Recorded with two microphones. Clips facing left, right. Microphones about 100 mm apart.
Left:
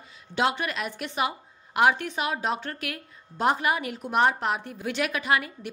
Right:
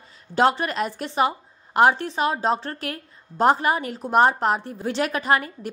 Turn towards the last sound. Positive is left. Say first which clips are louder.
# right 4 dB
turn(degrees=-40)  # may be behind; listen again after turning